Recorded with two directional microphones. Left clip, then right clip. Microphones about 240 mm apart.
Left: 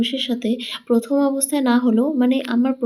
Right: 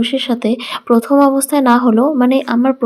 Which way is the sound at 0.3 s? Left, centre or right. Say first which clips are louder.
Right 6 dB; right.